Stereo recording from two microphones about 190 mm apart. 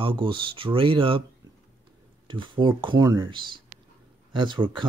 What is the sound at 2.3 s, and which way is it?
Speech, 25° right (ahead or behind).